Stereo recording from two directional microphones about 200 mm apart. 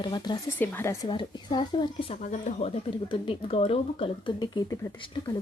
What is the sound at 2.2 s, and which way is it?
Speech, 40° left (ahead or behind).